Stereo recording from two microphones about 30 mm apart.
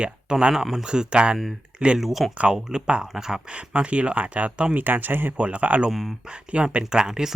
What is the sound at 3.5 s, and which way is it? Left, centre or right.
Speech, right.